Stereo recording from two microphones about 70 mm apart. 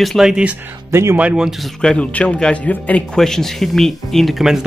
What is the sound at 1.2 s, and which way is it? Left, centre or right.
Speech, centre.